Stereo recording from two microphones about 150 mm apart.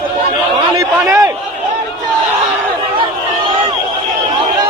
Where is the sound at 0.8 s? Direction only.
20° right (ahead or behind).